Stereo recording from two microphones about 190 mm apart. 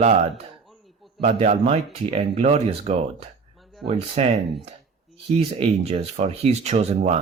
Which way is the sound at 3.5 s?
Centre (ahead or behind).